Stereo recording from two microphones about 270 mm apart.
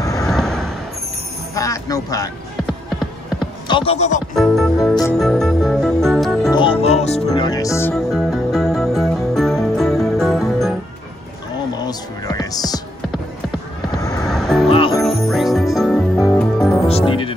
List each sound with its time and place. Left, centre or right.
0.0 s vehicle: centre
0.3 s vehicle: centre
1.5 s a man's voice: centre
3.6 s speech: centre
5.1 s music: centre
6.5 s music: centre
7.2 s speech: centre
7.9 s music: centre
11.7 s music: centre
14.2 s music: centre
14.7 s music: centre
15.0 s jingle bell: centre
15.7 s music: centre
16.8 s music: left